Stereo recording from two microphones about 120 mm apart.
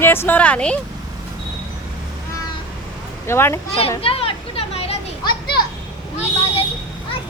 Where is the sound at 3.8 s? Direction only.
50° left (ahead or behind).